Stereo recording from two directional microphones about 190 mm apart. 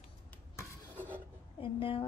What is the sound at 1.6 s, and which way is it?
Speech, 30° left (ahead or behind).